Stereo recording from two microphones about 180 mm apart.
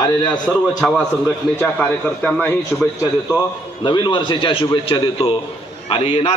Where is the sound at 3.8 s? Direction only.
25° left (ahead or behind).